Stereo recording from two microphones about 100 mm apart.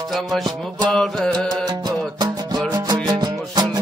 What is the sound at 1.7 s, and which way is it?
Music, 40° right (ahead or behind).